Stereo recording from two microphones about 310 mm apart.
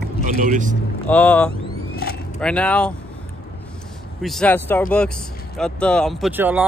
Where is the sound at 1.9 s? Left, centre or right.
Left.